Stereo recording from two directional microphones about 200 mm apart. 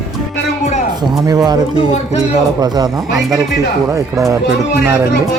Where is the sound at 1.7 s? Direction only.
30° left (ahead or behind).